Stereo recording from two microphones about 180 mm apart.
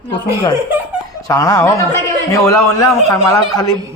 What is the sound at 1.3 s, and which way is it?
A man's voice, 20° left (ahead or behind).